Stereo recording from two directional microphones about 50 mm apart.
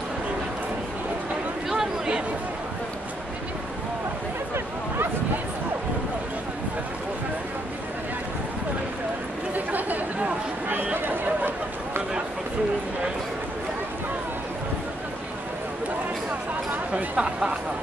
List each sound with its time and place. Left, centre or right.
9.7 s chatter: right
10.7 s a sound: right
16.3 s chatter: right